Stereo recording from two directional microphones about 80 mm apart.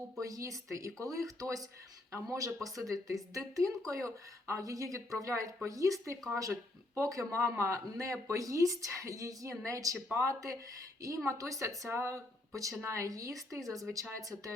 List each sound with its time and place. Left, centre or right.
0.2 s speech: right